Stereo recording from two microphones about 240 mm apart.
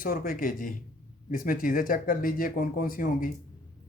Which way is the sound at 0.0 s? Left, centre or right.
Left.